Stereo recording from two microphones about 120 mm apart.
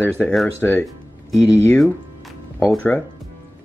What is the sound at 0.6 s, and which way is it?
Speech, 15° left (ahead or behind).